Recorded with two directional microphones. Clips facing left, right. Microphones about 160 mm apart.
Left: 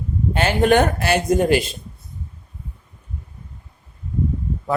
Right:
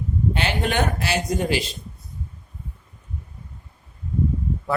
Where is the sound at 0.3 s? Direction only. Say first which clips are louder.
Left 10 dB; 45° left (ahead or behind).